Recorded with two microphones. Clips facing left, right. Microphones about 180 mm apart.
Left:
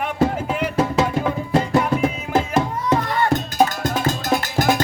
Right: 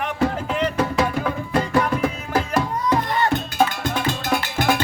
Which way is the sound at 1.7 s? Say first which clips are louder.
Left 2 dB; 25° left (ahead or behind).